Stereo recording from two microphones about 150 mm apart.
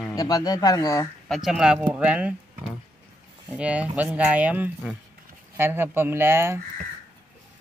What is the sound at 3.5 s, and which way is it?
Speech, 10° right (ahead or behind).